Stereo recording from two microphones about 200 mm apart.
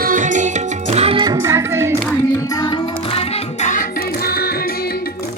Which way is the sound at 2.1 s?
15° left (ahead or behind).